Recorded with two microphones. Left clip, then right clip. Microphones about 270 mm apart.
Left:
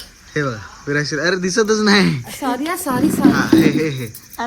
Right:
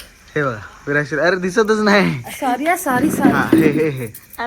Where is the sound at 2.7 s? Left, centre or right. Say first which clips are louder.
Right 1 dB; centre.